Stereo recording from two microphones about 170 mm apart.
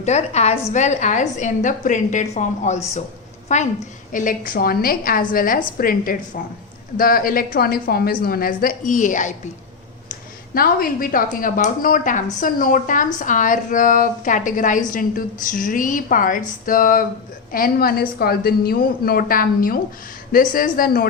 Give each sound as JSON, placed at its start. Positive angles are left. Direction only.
{"t": 0.0, "sound": "a woman's voice", "side_deg": 40}
{"t": 10.1, "sound": "a woman's voice", "side_deg": 60}